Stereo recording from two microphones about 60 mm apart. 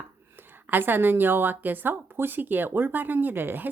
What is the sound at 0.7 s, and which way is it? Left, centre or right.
A woman's voice, right.